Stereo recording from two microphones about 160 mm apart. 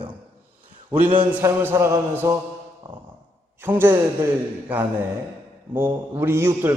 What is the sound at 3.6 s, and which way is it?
Speech, 15° right (ahead or behind).